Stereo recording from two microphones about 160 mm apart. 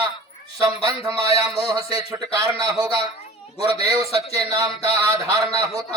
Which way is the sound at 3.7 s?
40° left (ahead or behind).